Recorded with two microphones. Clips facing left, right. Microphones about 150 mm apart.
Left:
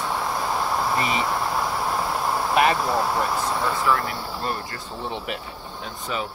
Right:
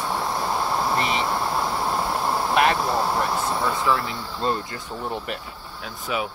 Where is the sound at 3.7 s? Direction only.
15° right (ahead or behind).